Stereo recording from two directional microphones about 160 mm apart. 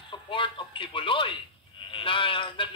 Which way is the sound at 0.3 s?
30° left (ahead or behind).